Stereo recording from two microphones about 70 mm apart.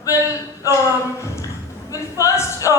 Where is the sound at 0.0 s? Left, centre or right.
Left.